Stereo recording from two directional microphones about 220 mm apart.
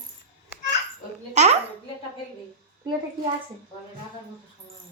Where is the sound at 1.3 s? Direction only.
30° right (ahead or behind).